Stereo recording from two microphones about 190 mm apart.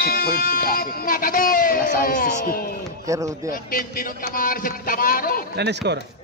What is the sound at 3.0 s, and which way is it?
Speech, 15° right (ahead or behind).